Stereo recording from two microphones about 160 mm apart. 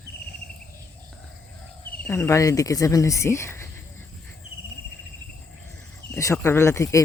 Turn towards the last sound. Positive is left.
turn(degrees=15)  # may be behind; listen again after turning